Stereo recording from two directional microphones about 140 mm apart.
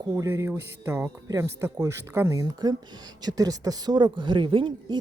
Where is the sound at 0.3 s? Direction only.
20° right (ahead or behind).